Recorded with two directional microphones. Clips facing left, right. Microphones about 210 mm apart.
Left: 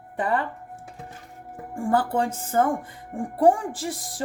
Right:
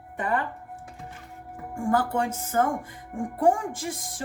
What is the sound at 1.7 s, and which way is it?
Speech, 35° left (ahead or behind).